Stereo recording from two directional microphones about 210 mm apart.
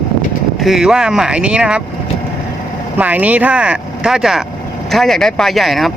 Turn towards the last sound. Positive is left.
turn(degrees=0)  # may be behind; listen again after turning